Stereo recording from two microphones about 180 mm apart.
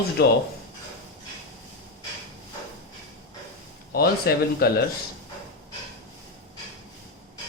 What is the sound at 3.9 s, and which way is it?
Speech, 60° left (ahead or behind).